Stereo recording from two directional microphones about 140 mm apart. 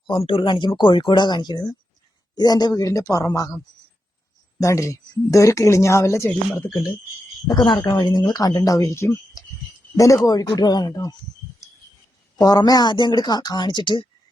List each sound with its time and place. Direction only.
0.1 s speech: 40° left (ahead or behind); by 3.6 s 25° left (ahead or behind)
4.6 s speech: 20° left (ahead or behind)
7.4 s speech: 30° left (ahead or behind)
12.4 s speech: 30° left (ahead or behind)